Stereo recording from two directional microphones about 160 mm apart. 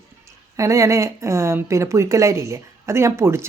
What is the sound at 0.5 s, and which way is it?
Speech, 20° right (ahead or behind).